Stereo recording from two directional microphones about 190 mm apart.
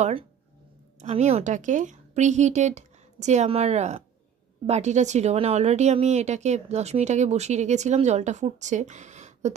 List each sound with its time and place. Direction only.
1.0 s speech: 35° right (ahead or behind)